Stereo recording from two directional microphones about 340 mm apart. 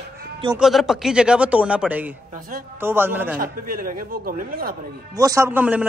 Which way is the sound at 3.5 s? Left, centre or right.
Right.